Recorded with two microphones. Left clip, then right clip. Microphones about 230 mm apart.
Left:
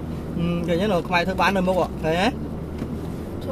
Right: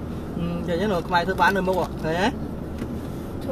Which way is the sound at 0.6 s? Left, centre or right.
Left.